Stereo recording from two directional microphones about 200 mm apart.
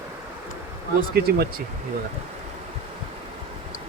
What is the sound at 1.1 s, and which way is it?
Speech, 50° right (ahead or behind).